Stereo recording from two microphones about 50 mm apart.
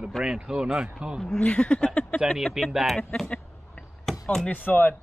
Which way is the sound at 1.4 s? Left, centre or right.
Left.